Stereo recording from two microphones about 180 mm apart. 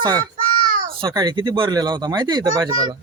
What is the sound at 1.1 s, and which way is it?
Speech, 25° right (ahead or behind).